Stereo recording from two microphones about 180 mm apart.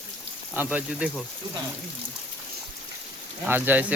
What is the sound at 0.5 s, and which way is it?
Speech, 10° right (ahead or behind).